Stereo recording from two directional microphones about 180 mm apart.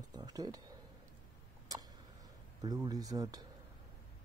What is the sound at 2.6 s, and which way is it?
Speech, 20° right (ahead or behind).